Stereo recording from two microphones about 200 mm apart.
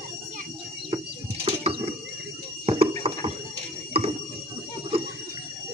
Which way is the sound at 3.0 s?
30° right (ahead or behind).